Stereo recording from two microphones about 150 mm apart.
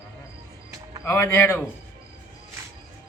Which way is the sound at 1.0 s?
15° left (ahead or behind).